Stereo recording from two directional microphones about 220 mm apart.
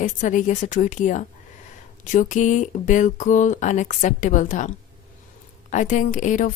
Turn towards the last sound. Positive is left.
turn(degrees=35)  # may be behind; listen again after turning